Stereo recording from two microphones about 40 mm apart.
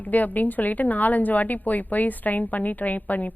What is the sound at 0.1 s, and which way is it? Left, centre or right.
A woman's voice, left.